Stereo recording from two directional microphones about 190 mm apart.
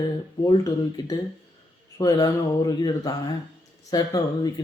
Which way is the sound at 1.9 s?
20° left (ahead or behind).